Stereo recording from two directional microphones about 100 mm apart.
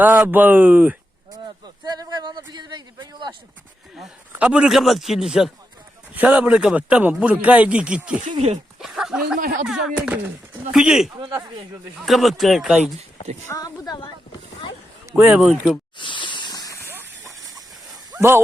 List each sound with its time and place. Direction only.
0.0 s a man's voice: 20° right (ahead or behind)
1.3 s speech: 45° right (ahead or behind)
4.3 s a man's voice: 20° right (ahead or behind)
4.5 s speech: 5° right (ahead or behind)
6.1 s a man's voice: 15° right (ahead or behind)
11.3 s speech: 35° right (ahead or behind)
11.9 s speech: centre (ahead or behind)
13.5 s speech: 40° left (ahead or behind)
15.2 s speech: 20° right (ahead or behind)
16.0 s a sound: 55° left (ahead or behind)
17.2 s a sound: 35° right (ahead or behind)